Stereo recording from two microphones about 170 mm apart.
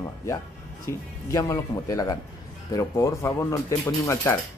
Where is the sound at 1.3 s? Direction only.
20° left (ahead or behind).